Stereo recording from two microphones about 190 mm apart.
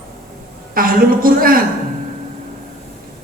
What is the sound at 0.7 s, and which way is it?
Speech, 50° right (ahead or behind).